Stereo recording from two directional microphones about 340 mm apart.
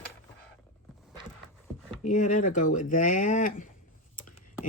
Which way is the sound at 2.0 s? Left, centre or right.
Left.